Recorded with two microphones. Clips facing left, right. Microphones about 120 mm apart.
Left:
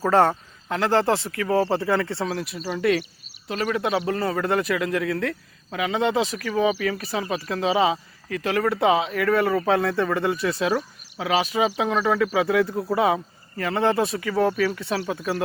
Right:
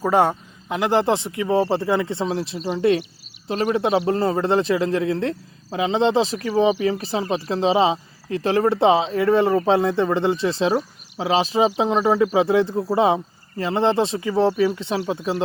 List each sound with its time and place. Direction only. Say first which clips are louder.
0.0 s a man's voice: even; 15° right (ahead or behind)